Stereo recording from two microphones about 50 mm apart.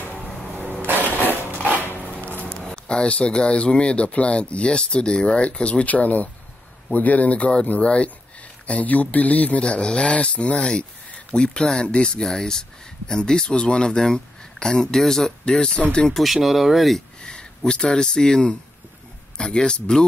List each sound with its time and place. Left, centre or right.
0.8 s mechanisms: right
2.0 s a sound: left
2.7 s speech: centre
16.4 s speech: centre
17.2 s speech: centre